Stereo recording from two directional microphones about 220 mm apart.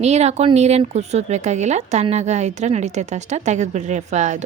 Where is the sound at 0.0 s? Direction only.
30° right (ahead or behind).